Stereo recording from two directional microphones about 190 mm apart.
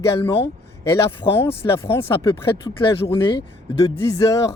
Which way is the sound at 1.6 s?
20° left (ahead or behind).